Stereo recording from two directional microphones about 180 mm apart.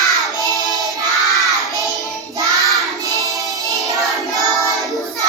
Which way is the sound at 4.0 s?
Centre (ahead or behind).